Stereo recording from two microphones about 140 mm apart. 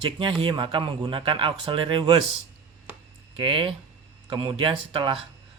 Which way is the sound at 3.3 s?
40° right (ahead or behind).